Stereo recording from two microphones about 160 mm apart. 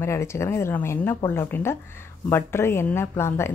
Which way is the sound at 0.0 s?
15° left (ahead or behind).